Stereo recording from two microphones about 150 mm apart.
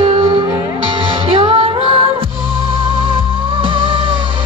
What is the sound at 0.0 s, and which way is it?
Music, 35° right (ahead or behind).